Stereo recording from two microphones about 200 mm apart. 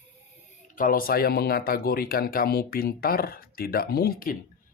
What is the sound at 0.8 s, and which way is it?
A man's voice, 45° left (ahead or behind).